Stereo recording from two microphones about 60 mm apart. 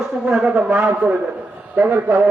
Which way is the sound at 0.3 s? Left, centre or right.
Centre.